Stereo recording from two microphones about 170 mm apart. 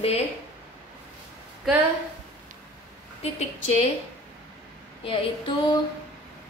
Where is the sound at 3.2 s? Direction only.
40° left (ahead or behind).